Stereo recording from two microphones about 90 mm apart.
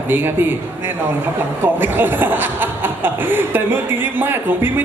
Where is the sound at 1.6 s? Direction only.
20° right (ahead or behind).